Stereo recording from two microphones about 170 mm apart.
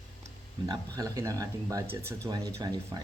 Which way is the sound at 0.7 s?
20° right (ahead or behind).